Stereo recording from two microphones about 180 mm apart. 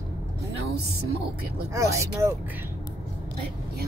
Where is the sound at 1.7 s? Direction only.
15° right (ahead or behind).